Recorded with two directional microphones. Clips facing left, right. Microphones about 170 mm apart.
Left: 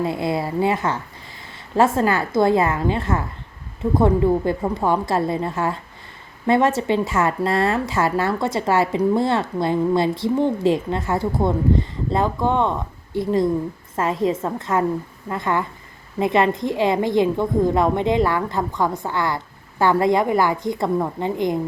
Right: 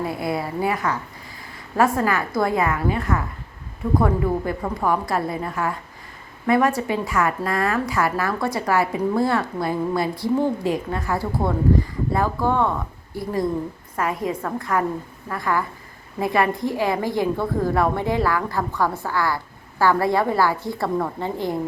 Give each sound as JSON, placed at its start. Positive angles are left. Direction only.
{"t": 0.0, "sound": "a woman's voice", "side_deg": 25}